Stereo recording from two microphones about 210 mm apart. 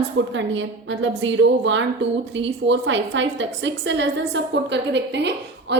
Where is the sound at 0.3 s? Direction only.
60° right (ahead or behind).